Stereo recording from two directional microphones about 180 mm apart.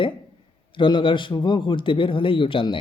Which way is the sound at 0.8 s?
25° left (ahead or behind).